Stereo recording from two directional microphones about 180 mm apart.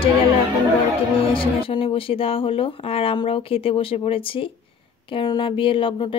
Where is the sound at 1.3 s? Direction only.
30° left (ahead or behind).